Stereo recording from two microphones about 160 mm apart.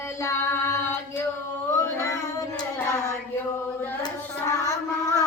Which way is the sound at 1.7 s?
15° left (ahead or behind).